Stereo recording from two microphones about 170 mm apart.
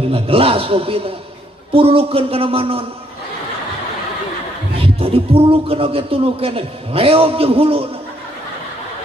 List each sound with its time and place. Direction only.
0.1 s a man's voice: 35° right (ahead or behind)
4.7 s a man's voice: 35° right (ahead or behind)